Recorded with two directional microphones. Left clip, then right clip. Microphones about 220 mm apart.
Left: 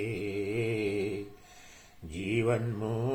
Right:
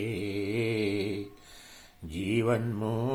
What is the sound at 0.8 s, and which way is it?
Mantra, 40° right (ahead or behind).